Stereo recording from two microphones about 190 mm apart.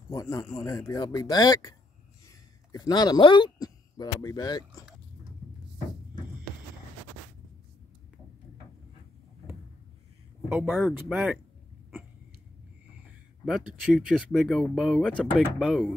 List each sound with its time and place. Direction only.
0.1 s speech: 15° left (ahead or behind)
10.5 s speech: centre (ahead or behind)
13.5 s speech: centre (ahead or behind)